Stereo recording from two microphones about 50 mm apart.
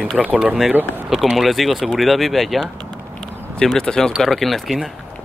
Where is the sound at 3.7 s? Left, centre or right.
Centre.